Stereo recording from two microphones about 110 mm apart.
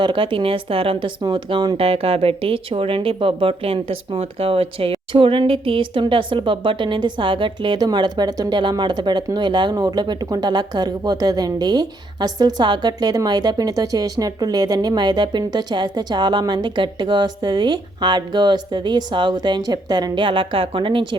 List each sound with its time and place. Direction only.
0.0 s speech: 50° right (ahead or behind)